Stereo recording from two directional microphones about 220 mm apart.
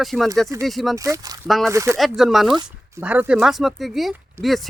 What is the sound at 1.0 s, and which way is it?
Speech, 15° right (ahead or behind).